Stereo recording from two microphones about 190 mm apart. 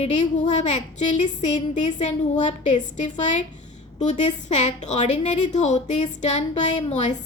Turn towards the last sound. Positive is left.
turn(degrees=35)  # may be behind; listen again after turning